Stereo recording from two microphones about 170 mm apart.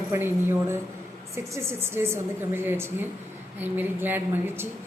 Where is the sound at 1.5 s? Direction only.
15° right (ahead or behind).